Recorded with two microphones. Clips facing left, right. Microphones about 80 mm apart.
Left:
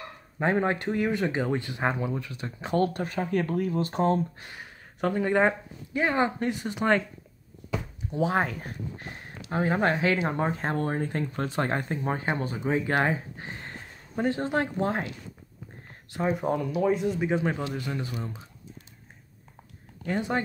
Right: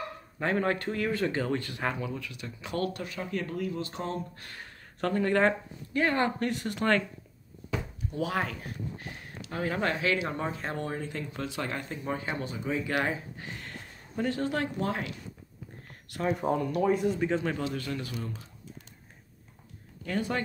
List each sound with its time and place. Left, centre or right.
0.4 s speech: left
4.4 s speech: centre
8.1 s speech: left
16.1 s speech: centre
16.3 s speech: centre
17.3 s speech: centre
20.1 s speech: left